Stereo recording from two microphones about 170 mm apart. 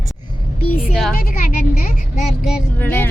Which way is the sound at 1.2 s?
60° left (ahead or behind).